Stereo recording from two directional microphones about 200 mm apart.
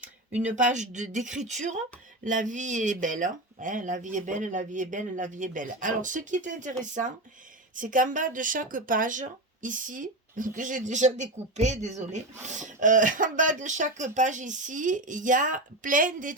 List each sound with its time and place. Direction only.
0.3 s speech: 40° right (ahead or behind)
7.8 s speech: 40° right (ahead or behind)